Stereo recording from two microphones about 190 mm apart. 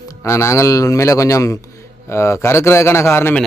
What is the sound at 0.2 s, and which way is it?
A man's voice, 15° left (ahead or behind).